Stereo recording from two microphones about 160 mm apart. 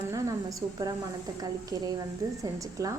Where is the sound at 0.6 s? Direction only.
30° right (ahead or behind).